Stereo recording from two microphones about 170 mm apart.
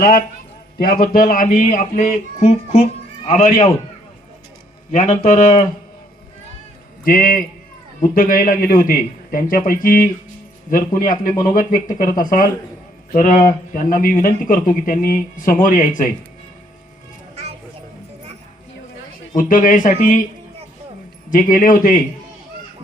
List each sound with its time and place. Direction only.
0.0 s a man's voice: 60° left (ahead or behind); by 3.4 s 40° left (ahead or behind)
4.9 s speech: 40° left (ahead or behind)
7.0 s a man's voice: 55° left (ahead or behind)
19.4 s speech: 50° left (ahead or behind)
21.2 s speech: 50° left (ahead or behind)